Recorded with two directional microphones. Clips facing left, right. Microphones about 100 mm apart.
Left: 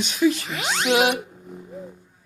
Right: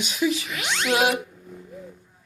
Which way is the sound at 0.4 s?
30° left (ahead or behind).